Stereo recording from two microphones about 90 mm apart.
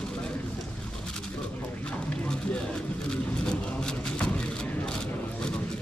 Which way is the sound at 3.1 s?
10° left (ahead or behind).